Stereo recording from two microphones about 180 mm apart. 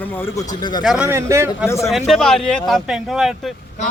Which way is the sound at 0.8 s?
5° right (ahead or behind).